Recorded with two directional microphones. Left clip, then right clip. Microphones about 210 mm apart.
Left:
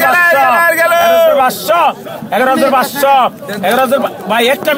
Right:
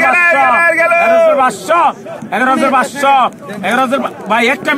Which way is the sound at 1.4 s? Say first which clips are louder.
Even; 40° left (ahead or behind).